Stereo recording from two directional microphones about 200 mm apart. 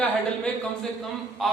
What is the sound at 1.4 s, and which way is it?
Speech, centre (ahead or behind).